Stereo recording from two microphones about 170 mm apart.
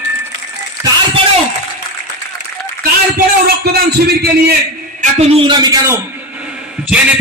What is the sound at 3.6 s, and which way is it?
Speech, 70° right (ahead or behind).